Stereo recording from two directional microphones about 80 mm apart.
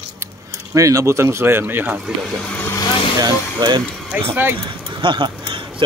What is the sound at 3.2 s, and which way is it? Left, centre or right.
Speech, right.